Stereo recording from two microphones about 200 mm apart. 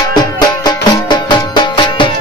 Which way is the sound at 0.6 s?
20° left (ahead or behind).